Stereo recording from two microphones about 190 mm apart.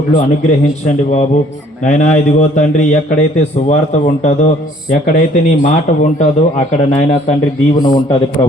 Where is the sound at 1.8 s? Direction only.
40° left (ahead or behind).